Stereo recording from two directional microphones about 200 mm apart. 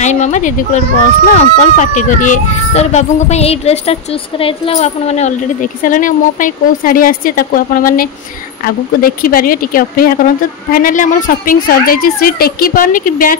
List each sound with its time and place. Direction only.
0.0 s a child's voice: 35° left (ahead or behind)